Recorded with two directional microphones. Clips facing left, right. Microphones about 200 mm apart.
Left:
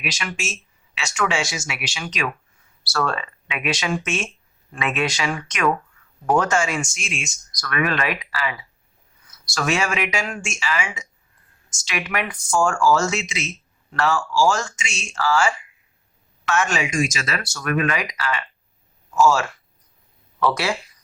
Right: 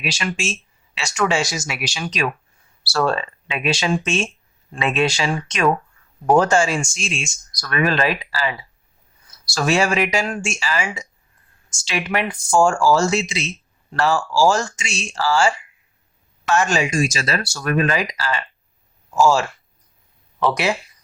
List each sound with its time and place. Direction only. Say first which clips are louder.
0.0 s speech: right 4 dB; 30° right (ahead or behind)
20.4 s speech: right 2 dB; 20° right (ahead or behind)